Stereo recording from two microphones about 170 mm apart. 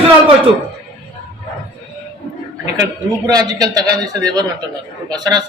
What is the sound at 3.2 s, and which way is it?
Speech, 20° right (ahead or behind).